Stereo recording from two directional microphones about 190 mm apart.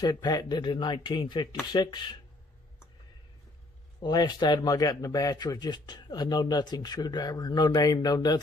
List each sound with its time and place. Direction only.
0.0 s speech: 20° left (ahead or behind)
4.0 s speech: 20° left (ahead or behind)